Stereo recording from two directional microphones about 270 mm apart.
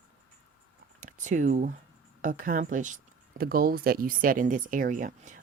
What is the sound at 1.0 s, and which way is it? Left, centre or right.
Speech, right.